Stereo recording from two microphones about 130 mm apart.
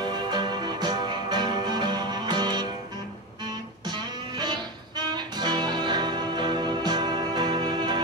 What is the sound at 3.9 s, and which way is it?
Music, 35° right (ahead or behind).